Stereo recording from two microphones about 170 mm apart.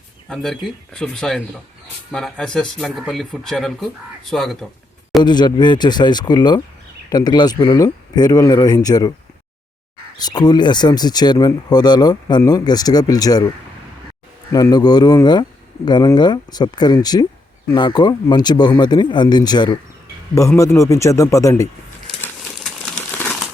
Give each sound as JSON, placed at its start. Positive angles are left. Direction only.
{"t": 0.3, "sound": "speech", "side_deg": 5}
{"t": 5.2, "sound": "speech", "side_deg": 25}
{"t": 10.2, "sound": "speech", "side_deg": 25}
{"t": 14.5, "sound": "speech", "side_deg": 20}
{"t": 22.6, "sound": "crumpling", "side_deg": 5}